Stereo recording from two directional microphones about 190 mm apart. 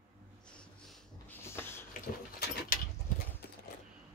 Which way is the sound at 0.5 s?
5° left (ahead or behind).